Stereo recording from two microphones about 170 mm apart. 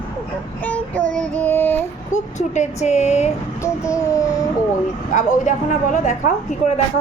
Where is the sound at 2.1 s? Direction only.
45° left (ahead or behind).